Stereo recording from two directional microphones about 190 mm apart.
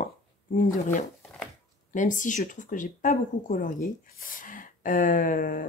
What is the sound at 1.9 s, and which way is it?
Speech, 40° left (ahead or behind).